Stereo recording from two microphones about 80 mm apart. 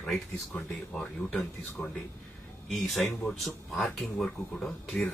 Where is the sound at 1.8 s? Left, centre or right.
Centre.